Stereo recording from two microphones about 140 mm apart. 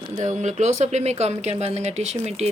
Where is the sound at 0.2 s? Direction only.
60° right (ahead or behind).